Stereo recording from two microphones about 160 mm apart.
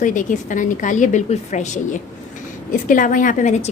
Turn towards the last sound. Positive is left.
turn(degrees=50)  # may be behind; listen again after turning